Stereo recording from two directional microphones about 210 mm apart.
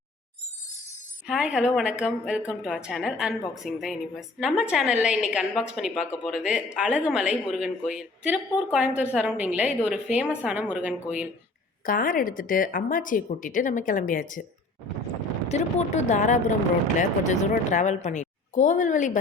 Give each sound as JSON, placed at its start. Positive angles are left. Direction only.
{"t": 1.3, "sound": "a woman's voice", "side_deg": -5}
{"t": 11.9, "sound": "speech", "side_deg": 40}
{"t": 15.4, "sound": "speech", "side_deg": 30}